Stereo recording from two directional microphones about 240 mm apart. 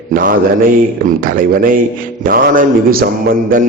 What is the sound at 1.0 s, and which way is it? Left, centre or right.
A man's voice, right.